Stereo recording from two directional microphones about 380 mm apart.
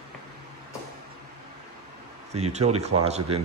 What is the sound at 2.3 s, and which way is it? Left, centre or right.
Speech, centre.